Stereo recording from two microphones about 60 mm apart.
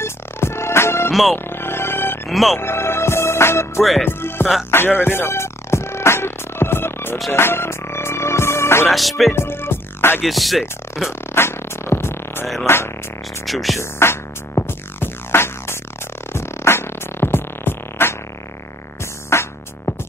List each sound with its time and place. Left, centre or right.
0.0 s music: left
2.2 s speech: centre
2.6 s music: left
8.8 s music: centre
9.3 s music: left
10.2 s music: centre
11.1 s music: left
13.5 s music: centre
13.7 s music: left
19.3 s music: left